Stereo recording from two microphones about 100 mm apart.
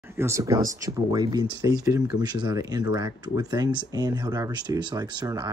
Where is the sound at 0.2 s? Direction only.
35° right (ahead or behind).